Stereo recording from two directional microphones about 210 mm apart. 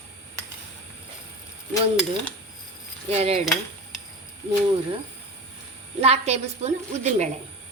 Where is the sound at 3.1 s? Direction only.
30° right (ahead or behind).